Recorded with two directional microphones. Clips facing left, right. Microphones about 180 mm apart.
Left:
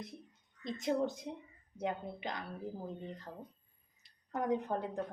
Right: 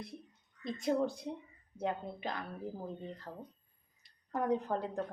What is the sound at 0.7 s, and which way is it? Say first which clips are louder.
Speech: right 1 dB; 20° left (ahead or behind).